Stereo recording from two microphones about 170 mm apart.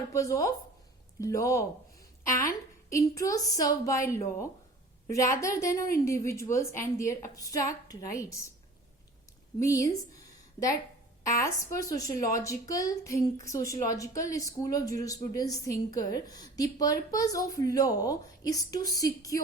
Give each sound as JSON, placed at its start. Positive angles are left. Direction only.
{"t": 0.1, "sound": "a woman's voice", "side_deg": 20}
{"t": 9.6, "sound": "speech", "side_deg": 20}
{"t": 11.3, "sound": "speech", "side_deg": 20}